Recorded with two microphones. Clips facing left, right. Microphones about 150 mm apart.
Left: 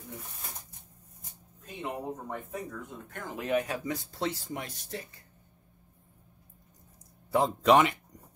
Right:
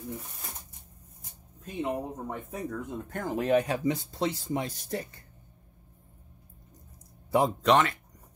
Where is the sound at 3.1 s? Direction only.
40° right (ahead or behind).